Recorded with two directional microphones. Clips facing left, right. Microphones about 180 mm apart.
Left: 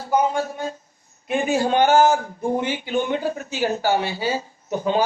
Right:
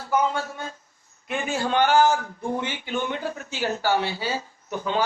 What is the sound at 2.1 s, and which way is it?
A man's voice, 15° left (ahead or behind).